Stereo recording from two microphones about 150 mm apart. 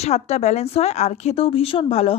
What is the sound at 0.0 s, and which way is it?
A woman's voice, 45° left (ahead or behind).